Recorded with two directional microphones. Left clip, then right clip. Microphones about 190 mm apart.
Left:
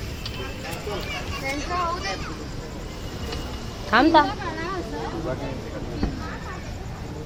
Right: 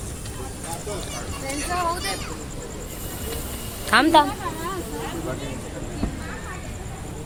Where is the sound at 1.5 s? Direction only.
50° right (ahead or behind).